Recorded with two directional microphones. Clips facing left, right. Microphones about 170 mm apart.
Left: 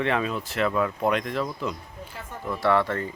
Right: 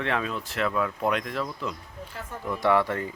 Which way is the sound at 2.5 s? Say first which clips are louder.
Even; 15° right (ahead or behind).